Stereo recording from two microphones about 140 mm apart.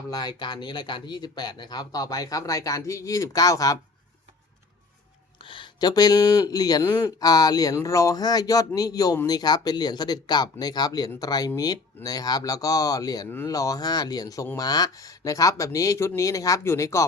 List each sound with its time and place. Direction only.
0.1 s speech: 30° left (ahead or behind)
5.4 s speech: 35° left (ahead or behind); by 17.1 s 20° left (ahead or behind)